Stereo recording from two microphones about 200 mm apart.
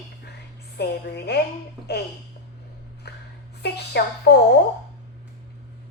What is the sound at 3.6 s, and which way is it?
Speech, 55° left (ahead or behind).